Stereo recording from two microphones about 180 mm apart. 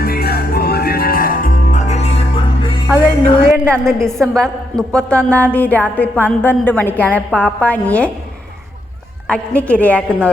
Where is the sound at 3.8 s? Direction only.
5° left (ahead or behind).